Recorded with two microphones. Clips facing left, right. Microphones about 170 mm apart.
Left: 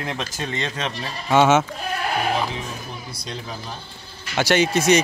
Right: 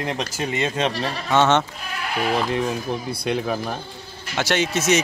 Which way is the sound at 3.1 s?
60° right (ahead or behind).